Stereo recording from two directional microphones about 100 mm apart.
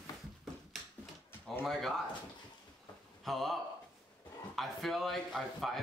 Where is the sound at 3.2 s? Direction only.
Centre (ahead or behind).